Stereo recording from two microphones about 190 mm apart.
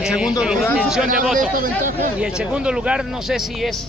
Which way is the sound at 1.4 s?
45° right (ahead or behind).